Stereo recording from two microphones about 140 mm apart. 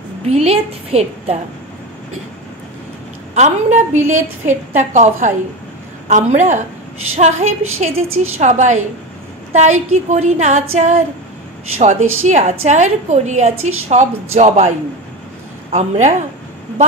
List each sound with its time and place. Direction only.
0.3 s a woman's voice: 45° right (ahead or behind)
3.3 s a woman's voice: 60° right (ahead or behind)
15.7 s a woman's voice: 55° right (ahead or behind)